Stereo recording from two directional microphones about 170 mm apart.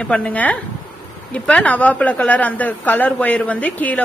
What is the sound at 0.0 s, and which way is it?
A woman's voice, 5° left (ahead or behind).